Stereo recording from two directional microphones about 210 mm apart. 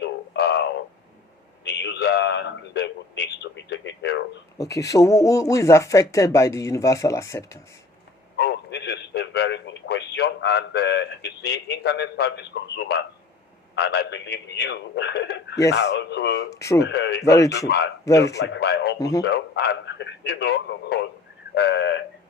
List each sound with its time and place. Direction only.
0.0 s a sound: 50° left (ahead or behind)
1.6 s a sound: 50° left (ahead or behind)
4.5 s speech: 15° left (ahead or behind)
8.4 s a sound: 55° left (ahead or behind)
13.7 s a man's voice: 50° left (ahead or behind)
16.5 s speech: 15° left (ahead or behind)
16.8 s a man's voice: 55° left (ahead or behind)
17.2 s speech: 15° left (ahead or behind)
18.3 s a man's voice: 55° left (ahead or behind)
18.9 s speech: 15° left (ahead or behind)
19.2 s a man's voice: 55° left (ahead or behind)